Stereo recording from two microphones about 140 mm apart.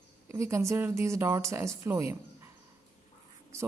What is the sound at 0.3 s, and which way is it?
A woman's voice, 20° right (ahead or behind).